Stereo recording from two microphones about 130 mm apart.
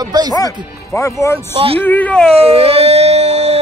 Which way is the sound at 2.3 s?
50° right (ahead or behind).